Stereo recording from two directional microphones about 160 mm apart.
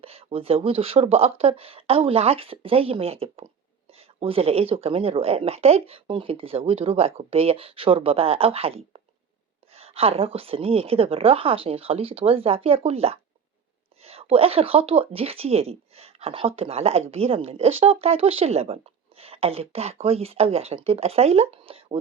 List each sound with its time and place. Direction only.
0.0 s speech: 40° right (ahead or behind)